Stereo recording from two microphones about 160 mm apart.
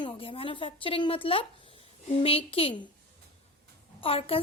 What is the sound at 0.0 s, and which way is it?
A woman's voice, 35° left (ahead or behind).